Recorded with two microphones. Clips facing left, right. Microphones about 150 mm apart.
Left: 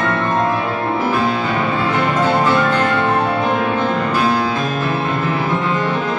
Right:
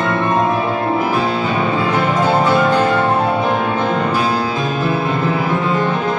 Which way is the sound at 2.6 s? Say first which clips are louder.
Right 2 dB; 10° right (ahead or behind).